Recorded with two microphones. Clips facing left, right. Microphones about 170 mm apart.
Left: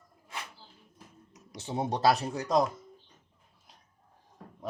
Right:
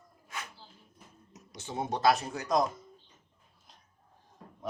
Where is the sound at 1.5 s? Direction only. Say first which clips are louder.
Left 2 dB; 30° left (ahead or behind).